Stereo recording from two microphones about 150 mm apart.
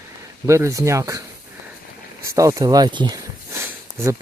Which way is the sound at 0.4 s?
20° right (ahead or behind).